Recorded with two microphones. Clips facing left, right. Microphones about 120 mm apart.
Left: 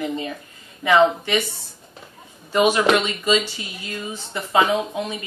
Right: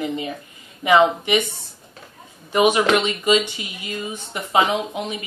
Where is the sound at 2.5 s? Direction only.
15° right (ahead or behind).